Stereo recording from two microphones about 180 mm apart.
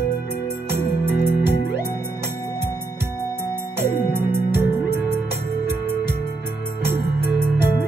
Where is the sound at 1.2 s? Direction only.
60° left (ahead or behind).